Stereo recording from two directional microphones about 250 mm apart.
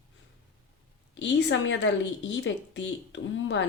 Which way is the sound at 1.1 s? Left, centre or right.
Left.